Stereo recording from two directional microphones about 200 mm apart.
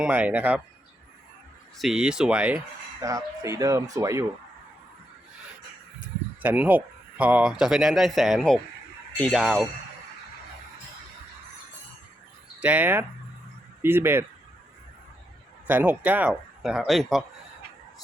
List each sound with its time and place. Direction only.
0.0 s speech: 10° right (ahead or behind)
1.8 s speech: 5° right (ahead or behind)
3.0 s speech: 15° right (ahead or behind)
6.4 s speech: 10° right (ahead or behind)
12.5 s speech: 10° right (ahead or behind)
15.6 s speech: 10° right (ahead or behind)